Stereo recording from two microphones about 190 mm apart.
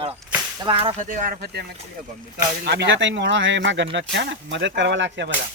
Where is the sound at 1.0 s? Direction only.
45° right (ahead or behind); by 5.3 s 70° right (ahead or behind).